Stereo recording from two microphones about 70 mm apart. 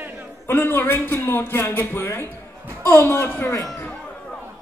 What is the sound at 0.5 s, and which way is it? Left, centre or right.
A man's voice, left.